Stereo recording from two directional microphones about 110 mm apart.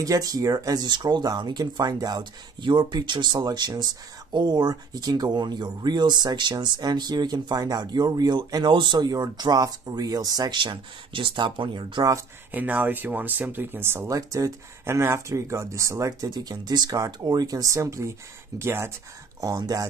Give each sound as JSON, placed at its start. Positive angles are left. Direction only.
{"t": 0.0, "sound": "speech", "side_deg": -35}
{"t": 12.4, "sound": "speech", "side_deg": -15}